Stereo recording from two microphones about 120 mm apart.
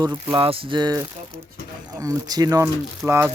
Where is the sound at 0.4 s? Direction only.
50° right (ahead or behind).